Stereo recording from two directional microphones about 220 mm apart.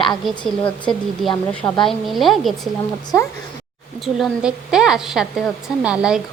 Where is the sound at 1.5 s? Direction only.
5° left (ahead or behind).